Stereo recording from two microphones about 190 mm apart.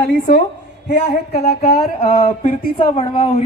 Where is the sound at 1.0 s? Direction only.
35° left (ahead or behind).